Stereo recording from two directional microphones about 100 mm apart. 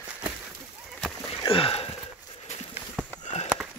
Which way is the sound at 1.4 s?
70° left (ahead or behind).